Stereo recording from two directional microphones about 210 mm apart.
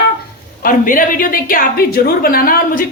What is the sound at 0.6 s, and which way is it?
A woman's voice, 40° left (ahead or behind).